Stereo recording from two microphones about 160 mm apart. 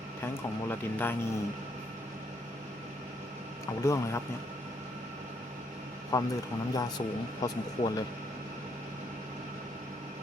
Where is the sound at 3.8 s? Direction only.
15° left (ahead or behind).